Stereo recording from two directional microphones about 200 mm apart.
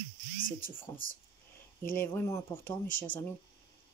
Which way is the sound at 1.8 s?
10° left (ahead or behind).